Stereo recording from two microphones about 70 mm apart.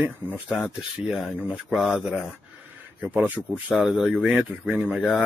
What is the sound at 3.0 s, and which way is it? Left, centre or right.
Speech, right.